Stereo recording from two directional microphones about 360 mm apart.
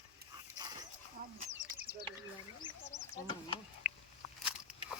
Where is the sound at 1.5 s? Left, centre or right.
Right.